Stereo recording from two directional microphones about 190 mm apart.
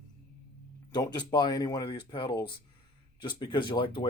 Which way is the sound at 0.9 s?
20° left (ahead or behind).